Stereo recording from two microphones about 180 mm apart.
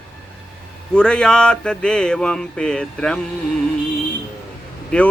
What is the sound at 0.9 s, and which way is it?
Speech, 5° left (ahead or behind).